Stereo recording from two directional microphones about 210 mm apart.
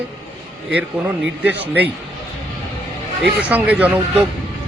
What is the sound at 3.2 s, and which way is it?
Speech, 5° right (ahead or behind).